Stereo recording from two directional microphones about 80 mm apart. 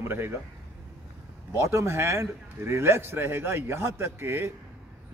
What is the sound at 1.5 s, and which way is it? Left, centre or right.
A man's voice, right.